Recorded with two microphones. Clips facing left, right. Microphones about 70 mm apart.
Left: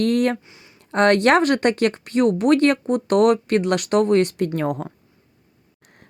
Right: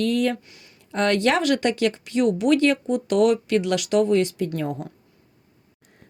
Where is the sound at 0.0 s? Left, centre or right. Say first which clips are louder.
Left 3 dB; left.